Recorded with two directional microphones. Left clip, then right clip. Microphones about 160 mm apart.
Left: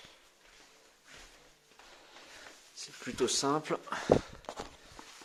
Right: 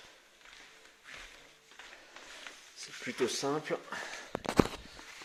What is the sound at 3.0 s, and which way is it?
Speech, 20° left (ahead or behind).